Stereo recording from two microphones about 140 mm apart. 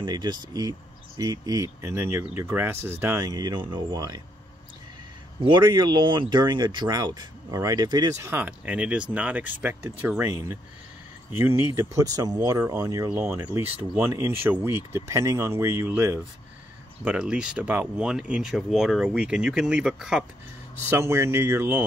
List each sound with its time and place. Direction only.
0.0 s speech: 30° right (ahead or behind)
5.4 s speech: 35° right (ahead or behind); by 20.2 s 5° right (ahead or behind)
20.9 s speech: 20° right (ahead or behind)